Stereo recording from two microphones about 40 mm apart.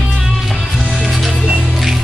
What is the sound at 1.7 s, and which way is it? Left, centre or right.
Music, centre.